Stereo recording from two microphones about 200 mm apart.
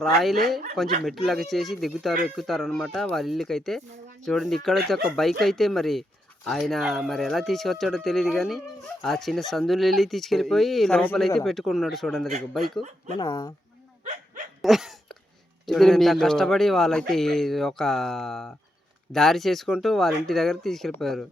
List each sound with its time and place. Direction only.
0.0 s speech: centre (ahead or behind)
13.1 s speech: 20° left (ahead or behind)
14.0 s dog: 35° right (ahead or behind)
14.6 s dog: centre (ahead or behind)
15.6 s speech: centre (ahead or behind)